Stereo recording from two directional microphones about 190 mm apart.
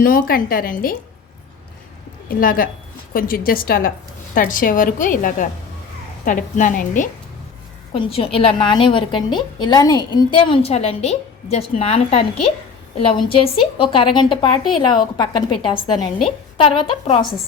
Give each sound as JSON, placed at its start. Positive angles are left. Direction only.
{"t": 0.0, "sound": "a woman's voice", "side_deg": 45}
{"t": 2.4, "sound": "a woman's voice", "side_deg": 50}
{"t": 7.9, "sound": "a woman's voice", "side_deg": 30}